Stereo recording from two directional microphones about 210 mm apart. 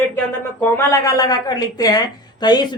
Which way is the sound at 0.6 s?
15° left (ahead or behind).